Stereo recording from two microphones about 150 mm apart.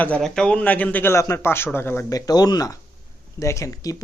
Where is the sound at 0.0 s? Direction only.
5° left (ahead or behind).